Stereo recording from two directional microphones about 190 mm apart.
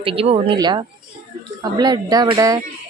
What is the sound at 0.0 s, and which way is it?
Speech, 30° right (ahead or behind).